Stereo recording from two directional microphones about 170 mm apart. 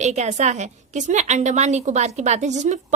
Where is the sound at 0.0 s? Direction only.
40° right (ahead or behind).